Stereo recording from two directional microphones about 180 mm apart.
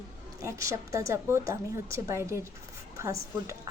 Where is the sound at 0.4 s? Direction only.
15° right (ahead or behind).